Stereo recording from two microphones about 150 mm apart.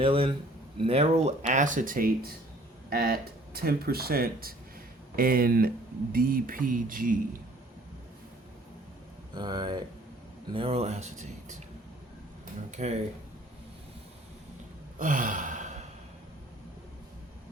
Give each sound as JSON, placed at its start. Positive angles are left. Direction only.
{"t": 0.0, "sound": "a man's voice", "side_deg": -35}
{"t": 2.9, "sound": "speech", "side_deg": -90}
{"t": 9.3, "sound": "speech", "side_deg": -30}
{"t": 12.7, "sound": "speech", "side_deg": -50}
{"t": 14.9, "sound": "sigh", "side_deg": -60}